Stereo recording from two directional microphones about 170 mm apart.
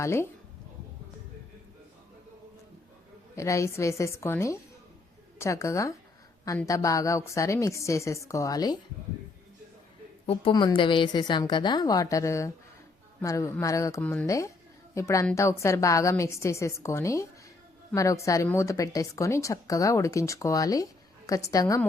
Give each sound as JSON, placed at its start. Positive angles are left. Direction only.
{"t": 0.0, "sound": "a woman's voice", "side_deg": 15}
{"t": 3.3, "sound": "a woman's voice", "side_deg": 15}
{"t": 10.5, "sound": "speech", "side_deg": 25}
{"t": 14.0, "sound": "a woman's voice", "side_deg": 10}